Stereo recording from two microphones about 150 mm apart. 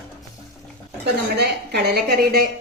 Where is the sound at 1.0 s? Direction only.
90° right.